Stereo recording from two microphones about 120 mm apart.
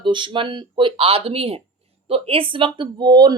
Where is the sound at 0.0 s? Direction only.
45° right (ahead or behind).